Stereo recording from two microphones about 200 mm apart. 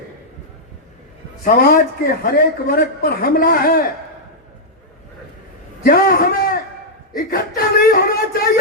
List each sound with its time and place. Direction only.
1.5 s speech: 45° left (ahead or behind)
5.8 s a sound: 45° left (ahead or behind)
7.2 s speech: 45° left (ahead or behind)